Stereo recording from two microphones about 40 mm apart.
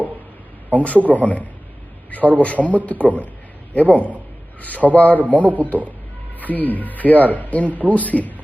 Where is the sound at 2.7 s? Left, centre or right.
Left.